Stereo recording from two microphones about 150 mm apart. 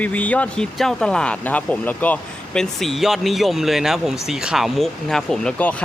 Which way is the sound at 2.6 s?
Centre (ahead or behind).